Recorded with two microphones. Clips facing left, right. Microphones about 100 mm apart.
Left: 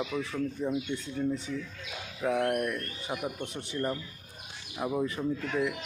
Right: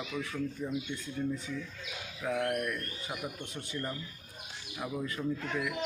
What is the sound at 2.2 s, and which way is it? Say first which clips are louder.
Speech: left 4 dB; 30° left (ahead or behind).